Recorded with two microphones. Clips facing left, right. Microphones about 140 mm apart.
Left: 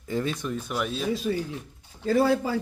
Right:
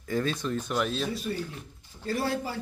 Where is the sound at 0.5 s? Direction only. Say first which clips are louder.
Right 1 dB; 5° left (ahead or behind).